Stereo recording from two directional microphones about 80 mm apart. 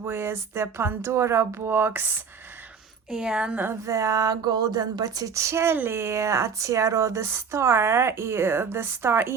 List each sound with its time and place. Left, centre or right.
0.0 s speech: right
3.1 s a woman's voice: centre
3.8 s speech: right